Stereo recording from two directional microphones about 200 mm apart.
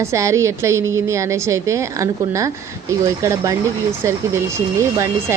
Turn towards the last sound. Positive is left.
turn(degrees=-15)  # may be behind; listen again after turning